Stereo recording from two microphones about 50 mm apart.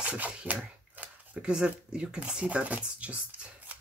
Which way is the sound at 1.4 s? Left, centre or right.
Right.